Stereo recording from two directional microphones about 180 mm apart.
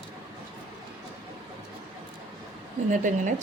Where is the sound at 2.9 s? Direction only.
45° right (ahead or behind).